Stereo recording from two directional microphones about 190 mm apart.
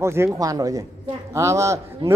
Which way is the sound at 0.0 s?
15° right (ahead or behind).